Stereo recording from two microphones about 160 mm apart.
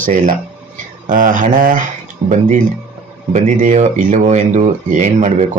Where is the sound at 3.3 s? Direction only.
55° right (ahead or behind).